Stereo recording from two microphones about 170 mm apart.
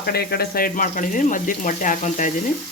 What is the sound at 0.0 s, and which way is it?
Speech, 65° left (ahead or behind).